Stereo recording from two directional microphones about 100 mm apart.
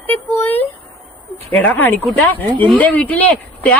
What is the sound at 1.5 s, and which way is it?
Speech, 15° left (ahead or behind).